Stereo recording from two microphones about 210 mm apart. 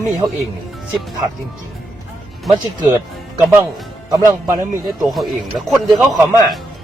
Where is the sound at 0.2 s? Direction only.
20° right (ahead or behind).